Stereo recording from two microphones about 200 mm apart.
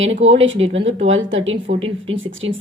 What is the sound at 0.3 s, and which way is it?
Speech, 70° right (ahead or behind).